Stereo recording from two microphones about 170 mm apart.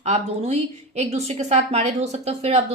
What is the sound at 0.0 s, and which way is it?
A woman's voice, 40° right (ahead or behind).